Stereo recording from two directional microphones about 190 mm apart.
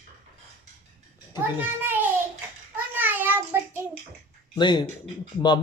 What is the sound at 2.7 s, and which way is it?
Child singing, 10° right (ahead or behind).